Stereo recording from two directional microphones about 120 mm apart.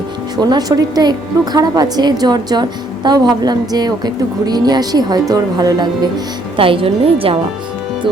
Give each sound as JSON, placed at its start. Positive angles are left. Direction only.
{"t": 0.3, "sound": "a woman's voice", "side_deg": -35}
{"t": 6.6, "sound": "a woman's voice", "side_deg": -50}